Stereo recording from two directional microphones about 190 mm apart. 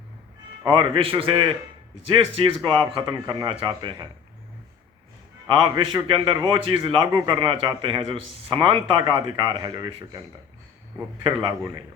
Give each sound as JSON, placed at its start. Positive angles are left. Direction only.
{"t": 0.6, "sound": "a man's voice", "side_deg": -25}
{"t": 5.5, "sound": "a man's voice", "side_deg": -25}
{"t": 11.2, "sound": "a man's voice", "side_deg": -25}